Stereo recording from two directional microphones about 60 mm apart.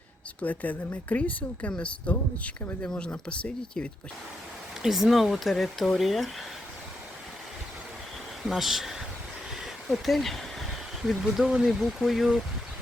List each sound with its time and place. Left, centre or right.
0.4 s speech: left
4.8 s speech: centre
8.4 s speech: centre